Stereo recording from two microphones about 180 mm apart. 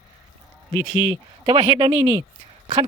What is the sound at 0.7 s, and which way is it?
Speech, 25° right (ahead or behind).